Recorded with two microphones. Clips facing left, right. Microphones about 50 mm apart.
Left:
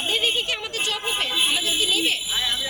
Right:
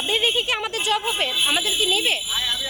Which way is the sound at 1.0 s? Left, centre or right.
Centre.